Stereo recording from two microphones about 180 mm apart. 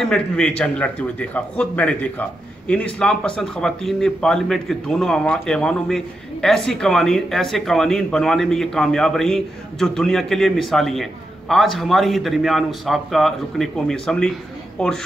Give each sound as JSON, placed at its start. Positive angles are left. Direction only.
{"t": 0.0, "sound": "a man's voice", "side_deg": 5}